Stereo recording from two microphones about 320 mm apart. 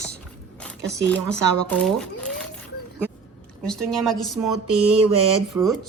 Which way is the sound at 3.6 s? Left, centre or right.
Centre.